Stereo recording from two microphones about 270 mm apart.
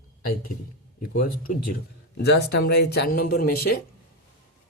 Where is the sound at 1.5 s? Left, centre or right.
Left.